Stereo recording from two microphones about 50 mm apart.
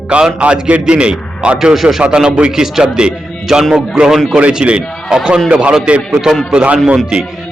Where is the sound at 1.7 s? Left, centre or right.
Centre.